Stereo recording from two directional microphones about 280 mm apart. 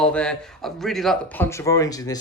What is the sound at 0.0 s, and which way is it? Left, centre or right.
A man's voice, centre.